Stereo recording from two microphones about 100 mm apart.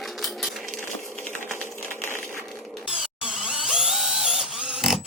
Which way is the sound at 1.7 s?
20° right (ahead or behind).